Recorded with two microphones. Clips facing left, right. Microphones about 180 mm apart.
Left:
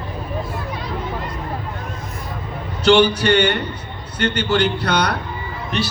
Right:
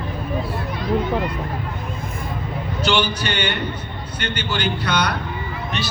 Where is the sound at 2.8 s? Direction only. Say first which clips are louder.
Left 8 dB; 65° left (ahead or behind).